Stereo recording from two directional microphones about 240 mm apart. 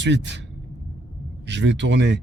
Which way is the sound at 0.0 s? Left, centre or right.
Right.